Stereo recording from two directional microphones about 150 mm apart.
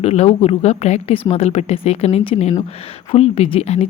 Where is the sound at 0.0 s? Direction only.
45° left (ahead or behind).